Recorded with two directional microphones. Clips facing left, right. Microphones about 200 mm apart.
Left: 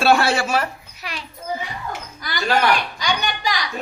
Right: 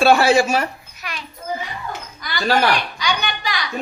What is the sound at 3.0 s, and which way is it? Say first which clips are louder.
Speech: even; 45° left (ahead or behind).